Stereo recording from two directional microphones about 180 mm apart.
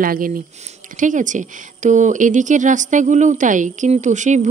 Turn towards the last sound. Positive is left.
turn(degrees=-40)  # may be behind; listen again after turning